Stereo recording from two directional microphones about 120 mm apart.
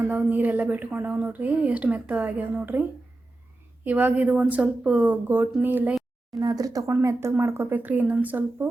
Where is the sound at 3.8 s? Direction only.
15° right (ahead or behind).